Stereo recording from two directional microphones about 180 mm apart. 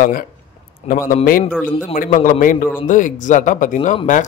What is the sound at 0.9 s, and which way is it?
Speech, 35° left (ahead or behind).